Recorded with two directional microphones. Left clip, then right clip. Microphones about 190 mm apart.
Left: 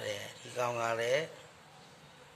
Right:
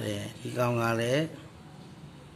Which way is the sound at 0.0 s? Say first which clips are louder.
Right 3 dB; 15° right (ahead or behind).